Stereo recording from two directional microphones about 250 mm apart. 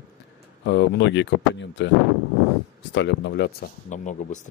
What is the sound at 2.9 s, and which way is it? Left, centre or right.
Speech, left.